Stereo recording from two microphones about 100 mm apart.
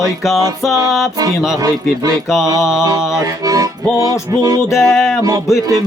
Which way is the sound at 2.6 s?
5° right (ahead or behind).